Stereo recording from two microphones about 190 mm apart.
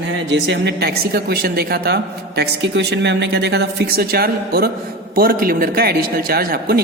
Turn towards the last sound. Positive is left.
turn(degrees=-50)  # may be behind; listen again after turning